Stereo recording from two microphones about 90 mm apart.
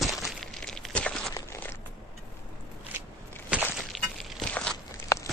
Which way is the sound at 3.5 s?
15° right (ahead or behind).